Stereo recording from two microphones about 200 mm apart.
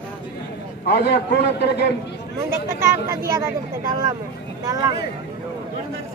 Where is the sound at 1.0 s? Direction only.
55° left (ahead or behind).